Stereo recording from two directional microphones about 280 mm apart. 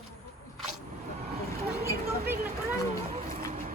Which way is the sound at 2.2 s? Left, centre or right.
Centre.